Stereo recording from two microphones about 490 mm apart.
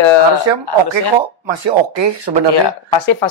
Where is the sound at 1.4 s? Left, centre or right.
Right.